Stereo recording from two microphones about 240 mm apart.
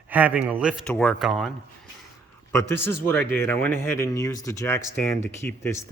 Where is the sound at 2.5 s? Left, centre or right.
Centre.